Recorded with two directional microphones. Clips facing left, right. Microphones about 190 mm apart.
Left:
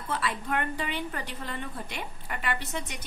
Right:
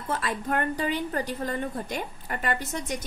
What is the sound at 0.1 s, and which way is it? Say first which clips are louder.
A woman's voice: right 2 dB; 45° right (ahead or behind).